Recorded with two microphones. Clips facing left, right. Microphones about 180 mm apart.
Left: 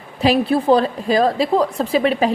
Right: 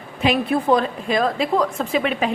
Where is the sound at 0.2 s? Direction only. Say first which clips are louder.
Left 3 dB; 35° left (ahead or behind).